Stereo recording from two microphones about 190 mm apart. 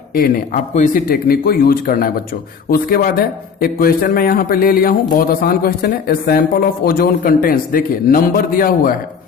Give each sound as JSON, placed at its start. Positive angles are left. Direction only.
{"t": 0.1, "sound": "a man's voice", "side_deg": 50}